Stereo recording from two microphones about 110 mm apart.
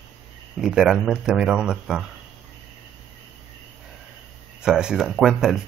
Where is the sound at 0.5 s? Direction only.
5° right (ahead or behind).